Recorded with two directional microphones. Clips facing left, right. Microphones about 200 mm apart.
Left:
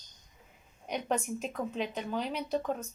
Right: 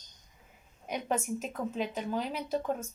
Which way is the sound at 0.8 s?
5° right (ahead or behind).